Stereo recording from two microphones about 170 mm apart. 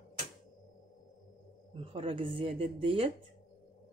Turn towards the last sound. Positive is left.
turn(degrees=-30)  # may be behind; listen again after turning